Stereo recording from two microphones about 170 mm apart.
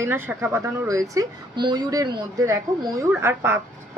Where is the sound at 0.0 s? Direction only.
15° right (ahead or behind).